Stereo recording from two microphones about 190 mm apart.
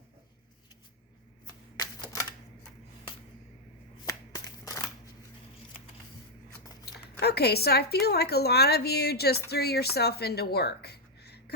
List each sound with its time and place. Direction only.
1.5 s typewriter: 20° left (ahead or behind)
4.0 s shuffling cards: 15° left (ahead or behind)
6.8 s speech: 60° left (ahead or behind)